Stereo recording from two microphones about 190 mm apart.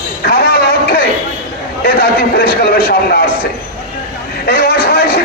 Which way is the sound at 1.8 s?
55° left (ahead or behind).